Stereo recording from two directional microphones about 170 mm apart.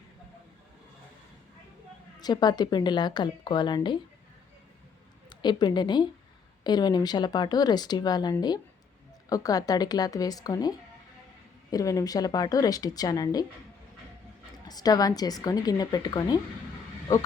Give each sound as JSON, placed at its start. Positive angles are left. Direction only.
{"t": 2.2, "sound": "speech", "side_deg": 25}
{"t": 5.3, "sound": "a woman's voice", "side_deg": 25}
{"t": 14.7, "sound": "speech", "side_deg": 20}